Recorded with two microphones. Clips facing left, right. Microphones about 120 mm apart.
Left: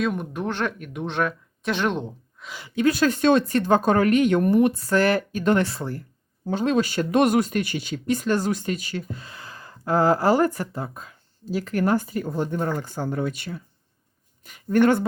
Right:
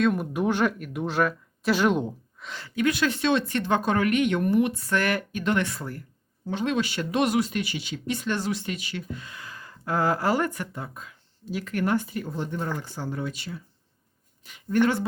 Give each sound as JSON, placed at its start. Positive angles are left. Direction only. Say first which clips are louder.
{"t": 0.0, "sound": "speech", "louder": "right 2 dB", "side_deg": 0}
{"t": 0.3, "sound": "speech", "louder": "right 3 dB", "side_deg": -10}
{"t": 2.5, "sound": "speech", "louder": "even", "side_deg": 10}
{"t": 2.7, "sound": "speech", "louder": "left 4 dB", "side_deg": 35}